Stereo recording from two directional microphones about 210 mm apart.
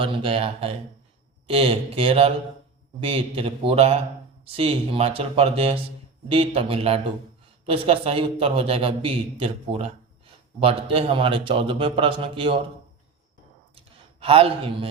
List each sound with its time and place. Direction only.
0.0 s a man's voice: 25° right (ahead or behind)
14.2 s a man's voice: 25° right (ahead or behind)